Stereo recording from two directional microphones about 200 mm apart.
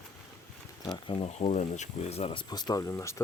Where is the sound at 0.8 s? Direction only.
25° left (ahead or behind).